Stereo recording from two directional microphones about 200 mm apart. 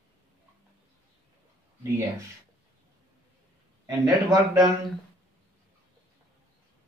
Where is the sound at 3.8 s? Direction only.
20° right (ahead or behind).